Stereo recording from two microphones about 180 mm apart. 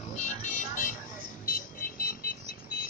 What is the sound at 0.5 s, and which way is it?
Vehicle, 45° left (ahead or behind).